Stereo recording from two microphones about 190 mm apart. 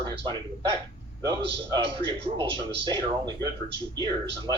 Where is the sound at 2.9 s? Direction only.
25° right (ahead or behind).